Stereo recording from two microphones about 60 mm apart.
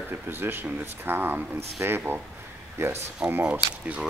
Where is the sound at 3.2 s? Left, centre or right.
Centre.